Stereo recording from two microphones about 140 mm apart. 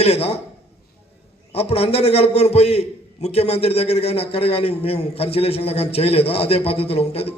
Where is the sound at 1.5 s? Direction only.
45° left (ahead or behind).